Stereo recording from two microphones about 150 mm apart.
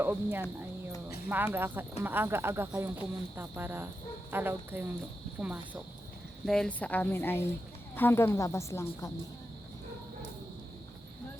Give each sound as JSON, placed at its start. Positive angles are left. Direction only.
{"t": 0.0, "sound": "speech", "side_deg": -15}
{"t": 1.5, "sound": "speech", "side_deg": -15}
{"t": 6.4, "sound": "speech", "side_deg": 5}